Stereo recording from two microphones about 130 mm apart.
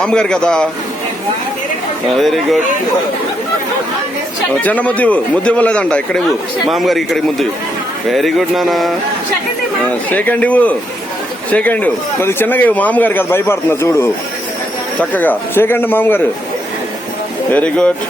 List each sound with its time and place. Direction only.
0.0 s a man's voice: 5° left (ahead or behind)
2.2 s mantra: centre (ahead or behind)
4.6 s a man's voice: 10° left (ahead or behind)
6.7 s mantra: centre (ahead or behind)
10.1 s a man's voice: 10° left (ahead or behind)
17.5 s a man's voice: 10° left (ahead or behind)